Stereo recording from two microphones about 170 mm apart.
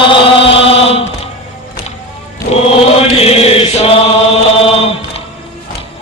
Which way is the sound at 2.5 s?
35° left (ahead or behind).